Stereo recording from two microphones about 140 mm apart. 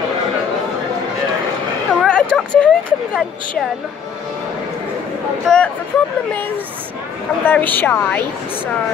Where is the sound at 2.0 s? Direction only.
5° left (ahead or behind).